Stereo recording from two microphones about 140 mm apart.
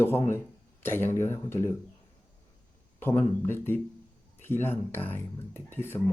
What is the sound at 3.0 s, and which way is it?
A man's voice, 15° left (ahead or behind).